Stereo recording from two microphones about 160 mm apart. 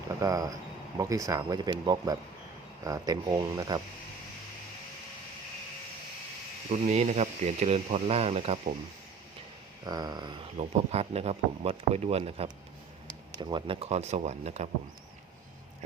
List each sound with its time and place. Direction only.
0.2 s speech: 20° right (ahead or behind)
6.7 s speech: 45° right (ahead or behind)
9.8 s speech: 25° right (ahead or behind)
10.6 s speech: 40° right (ahead or behind)
13.1 s speech: 25° right (ahead or behind); by 14.7 s 45° right (ahead or behind)